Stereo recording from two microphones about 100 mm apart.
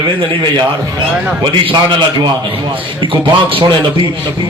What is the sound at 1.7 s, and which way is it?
A man's voice, 50° right (ahead or behind).